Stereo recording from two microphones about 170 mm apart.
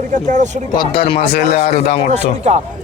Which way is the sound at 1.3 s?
55° left (ahead or behind).